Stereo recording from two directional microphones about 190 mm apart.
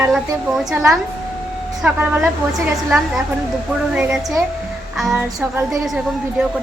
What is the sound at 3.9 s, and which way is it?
A woman's voice, 5° right (ahead or behind).